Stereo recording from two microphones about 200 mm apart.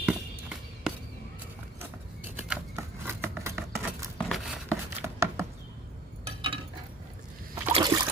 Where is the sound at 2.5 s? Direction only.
10° right (ahead or behind).